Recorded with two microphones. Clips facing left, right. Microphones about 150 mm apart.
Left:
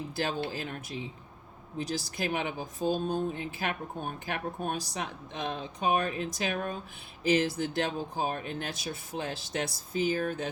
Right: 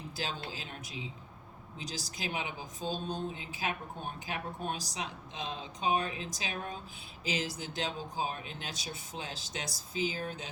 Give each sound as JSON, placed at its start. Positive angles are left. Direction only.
{"t": 0.5, "sound": "speech", "side_deg": 55}